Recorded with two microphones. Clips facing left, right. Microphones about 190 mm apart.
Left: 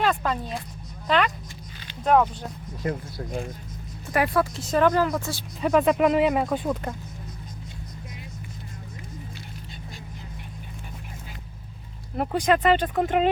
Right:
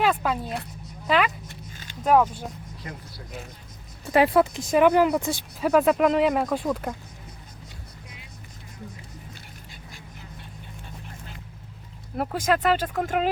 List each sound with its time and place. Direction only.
0.0 s speech: 5° right (ahead or behind)
2.8 s speech: 50° left (ahead or behind)
4.1 s speech: 25° right (ahead or behind)
5.5 s speech: 5° right (ahead or behind)
12.1 s speech: centre (ahead or behind)